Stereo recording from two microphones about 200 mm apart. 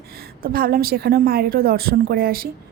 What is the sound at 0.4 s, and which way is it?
A woman's voice, 50° right (ahead or behind).